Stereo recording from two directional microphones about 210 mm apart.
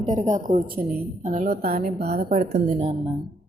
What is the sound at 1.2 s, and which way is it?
Speech, 30° right (ahead or behind).